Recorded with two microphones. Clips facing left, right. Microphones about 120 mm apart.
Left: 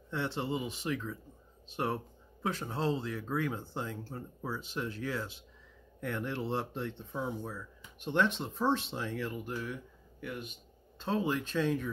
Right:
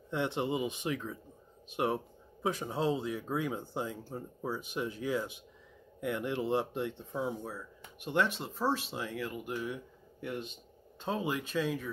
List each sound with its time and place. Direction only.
0.1 s speech: 15° right (ahead or behind)
9.5 s speech: 15° right (ahead or behind)
10.2 s speech: 30° right (ahead or behind)
11.0 s speech: 10° right (ahead or behind)